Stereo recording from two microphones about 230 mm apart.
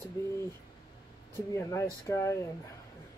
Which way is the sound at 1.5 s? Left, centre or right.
Centre.